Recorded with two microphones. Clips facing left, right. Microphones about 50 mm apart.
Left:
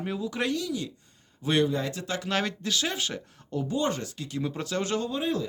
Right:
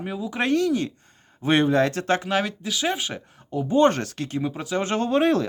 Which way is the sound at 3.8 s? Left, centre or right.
Right.